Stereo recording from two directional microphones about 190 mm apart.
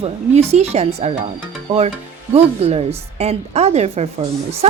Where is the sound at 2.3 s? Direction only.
30° right (ahead or behind).